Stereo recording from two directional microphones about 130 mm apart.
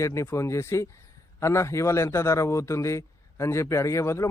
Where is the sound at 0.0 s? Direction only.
20° left (ahead or behind).